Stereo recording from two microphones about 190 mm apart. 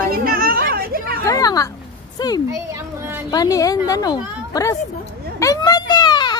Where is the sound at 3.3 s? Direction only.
20° left (ahead or behind).